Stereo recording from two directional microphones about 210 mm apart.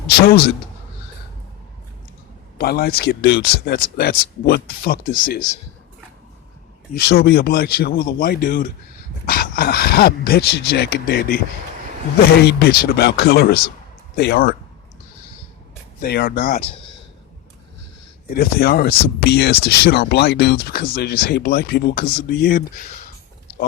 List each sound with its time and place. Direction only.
2.6 s speech: 50° left (ahead or behind)
6.9 s speech: 50° left (ahead or behind)
12.5 s speech: 50° left (ahead or behind)
16.0 s speech: 45° left (ahead or behind)
18.3 s speech: 45° left (ahead or behind)